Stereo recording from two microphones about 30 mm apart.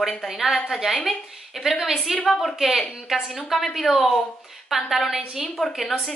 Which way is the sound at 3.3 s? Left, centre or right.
Centre.